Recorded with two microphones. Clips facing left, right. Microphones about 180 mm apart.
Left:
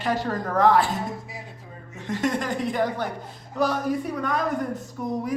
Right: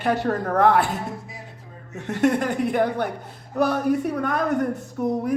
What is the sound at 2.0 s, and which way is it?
Speech, 65° right (ahead or behind).